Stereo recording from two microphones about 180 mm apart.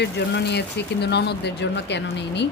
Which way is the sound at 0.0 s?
70° left (ahead or behind).